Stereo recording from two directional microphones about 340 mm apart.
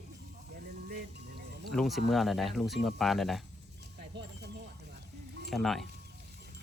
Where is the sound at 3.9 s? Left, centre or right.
Right.